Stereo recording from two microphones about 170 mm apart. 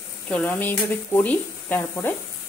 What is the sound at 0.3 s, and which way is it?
Speech, 10° left (ahead or behind).